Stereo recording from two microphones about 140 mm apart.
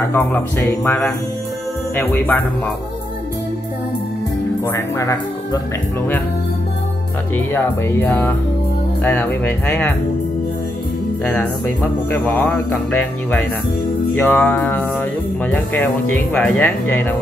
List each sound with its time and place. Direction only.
0.1 s speech: 15° left (ahead or behind)
4.6 s speech: 20° left (ahead or behind)
7.5 s speech: 15° left (ahead or behind)
12.1 s speech: 10° left (ahead or behind)
14.1 s speech: 5° left (ahead or behind)